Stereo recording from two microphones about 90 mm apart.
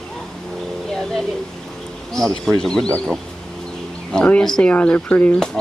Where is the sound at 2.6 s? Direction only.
5° left (ahead or behind).